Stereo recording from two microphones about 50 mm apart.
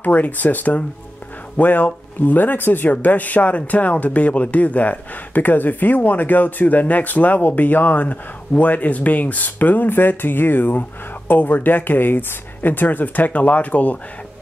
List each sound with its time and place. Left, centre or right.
0.0 s speech: left